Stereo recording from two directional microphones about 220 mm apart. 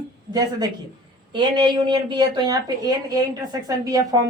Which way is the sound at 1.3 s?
20° right (ahead or behind).